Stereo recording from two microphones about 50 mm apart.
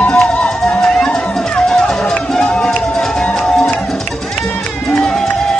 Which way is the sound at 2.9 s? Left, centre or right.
Centre.